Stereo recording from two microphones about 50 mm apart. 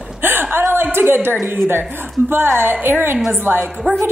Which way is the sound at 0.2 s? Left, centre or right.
Right.